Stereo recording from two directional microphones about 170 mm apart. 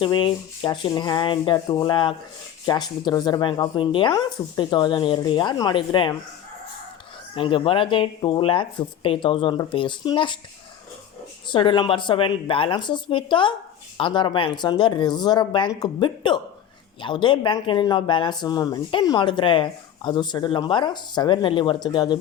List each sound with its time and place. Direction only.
0.0 s speech: 30° left (ahead or behind)
7.3 s speech: 30° left (ahead or behind)
11.4 s speech: 30° left (ahead or behind)